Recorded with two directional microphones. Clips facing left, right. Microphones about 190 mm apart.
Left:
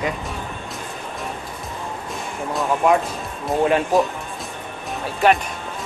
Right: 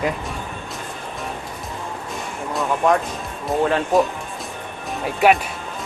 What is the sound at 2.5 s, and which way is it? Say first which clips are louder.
Music: left 1 dB; centre (ahead or behind).